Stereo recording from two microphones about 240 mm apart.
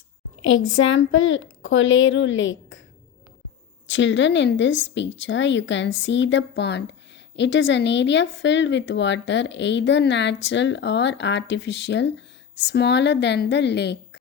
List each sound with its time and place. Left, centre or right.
0.4 s speech: left
3.8 s speech: left